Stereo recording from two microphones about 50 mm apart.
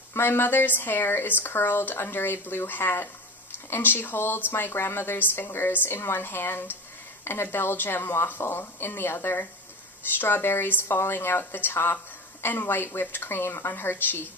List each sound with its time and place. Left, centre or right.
0.1 s a woman's voice: left
11.0 s a woman's voice: left